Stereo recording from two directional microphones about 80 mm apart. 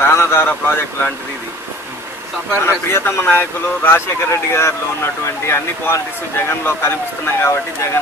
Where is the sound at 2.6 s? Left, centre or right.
Left.